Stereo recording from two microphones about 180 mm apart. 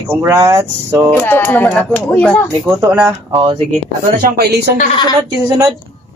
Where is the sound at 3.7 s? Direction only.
55° right (ahead or behind).